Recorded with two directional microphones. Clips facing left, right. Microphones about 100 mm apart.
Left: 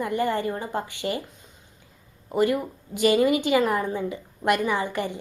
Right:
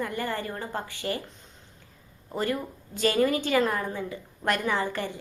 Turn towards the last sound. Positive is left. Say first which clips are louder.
# left 2 dB
turn(degrees=15)  # may be behind; listen again after turning